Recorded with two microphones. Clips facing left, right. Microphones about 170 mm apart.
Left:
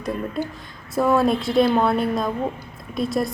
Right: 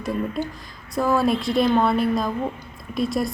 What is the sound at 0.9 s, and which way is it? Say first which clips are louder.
Speech: left 2 dB; centre (ahead or behind).